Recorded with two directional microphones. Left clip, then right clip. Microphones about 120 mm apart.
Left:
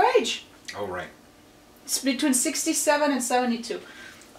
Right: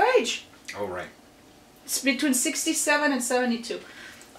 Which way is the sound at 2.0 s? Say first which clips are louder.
Even; centre (ahead or behind).